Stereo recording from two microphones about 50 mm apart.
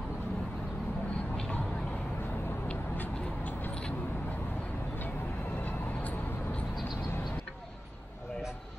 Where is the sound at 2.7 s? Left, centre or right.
Left.